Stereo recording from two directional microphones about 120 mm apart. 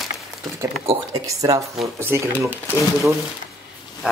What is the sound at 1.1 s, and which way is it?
Speech, 30° right (ahead or behind).